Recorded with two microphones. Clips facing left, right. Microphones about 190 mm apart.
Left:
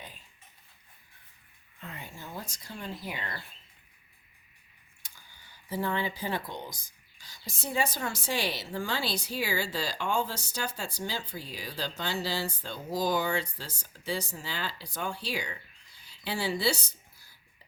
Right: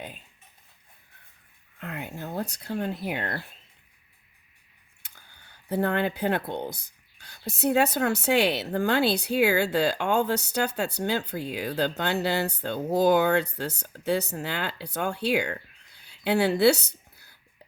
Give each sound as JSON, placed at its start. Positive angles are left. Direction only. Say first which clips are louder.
{"t": 1.8, "sound": "speech", "louder": "right 8 dB", "side_deg": -65}
{"t": 5.0, "sound": "speech", "louder": "right 2 dB", "side_deg": -60}